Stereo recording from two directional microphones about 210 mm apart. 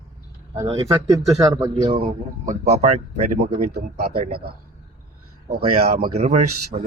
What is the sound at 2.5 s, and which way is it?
Speech, 30° right (ahead or behind).